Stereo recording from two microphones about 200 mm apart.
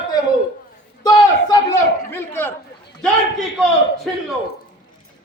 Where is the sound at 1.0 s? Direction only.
15° left (ahead or behind).